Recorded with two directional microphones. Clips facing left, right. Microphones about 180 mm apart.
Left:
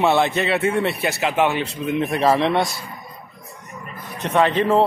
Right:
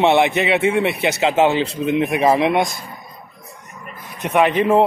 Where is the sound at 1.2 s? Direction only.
30° right (ahead or behind).